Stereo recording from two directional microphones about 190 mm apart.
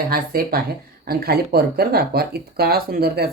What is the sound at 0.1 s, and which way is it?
Speech, 50° right (ahead or behind).